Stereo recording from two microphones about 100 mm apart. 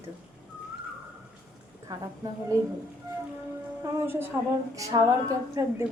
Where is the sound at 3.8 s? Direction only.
25° right (ahead or behind).